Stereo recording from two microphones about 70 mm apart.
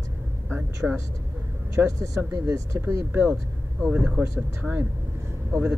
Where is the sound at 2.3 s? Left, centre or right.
Right.